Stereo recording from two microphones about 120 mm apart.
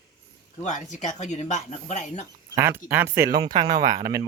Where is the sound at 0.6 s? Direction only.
90° left.